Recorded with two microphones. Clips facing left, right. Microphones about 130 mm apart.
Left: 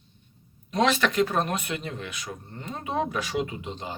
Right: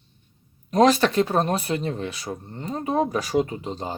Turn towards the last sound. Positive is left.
turn(degrees=-35)  # may be behind; listen again after turning